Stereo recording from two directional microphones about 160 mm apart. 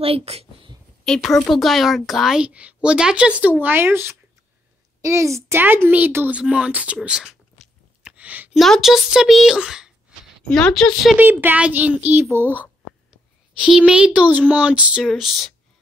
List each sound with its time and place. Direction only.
0.0 s a woman's voice: 40° right (ahead or behind)
1.0 s speech: 5° left (ahead or behind)
8.0 s a sound: 10° right (ahead or behind)
8.6 s speech: centre (ahead or behind)
11.1 s speech: 10° right (ahead or behind)